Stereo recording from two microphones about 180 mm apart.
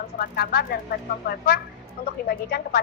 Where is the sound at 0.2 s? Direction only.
60° left (ahead or behind).